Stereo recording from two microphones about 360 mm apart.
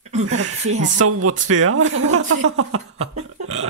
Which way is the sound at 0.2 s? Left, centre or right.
Right.